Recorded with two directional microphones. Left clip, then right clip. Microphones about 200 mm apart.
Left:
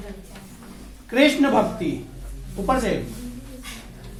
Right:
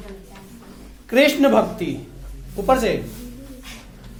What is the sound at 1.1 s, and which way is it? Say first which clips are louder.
Speech: right 2 dB; 55° right (ahead or behind).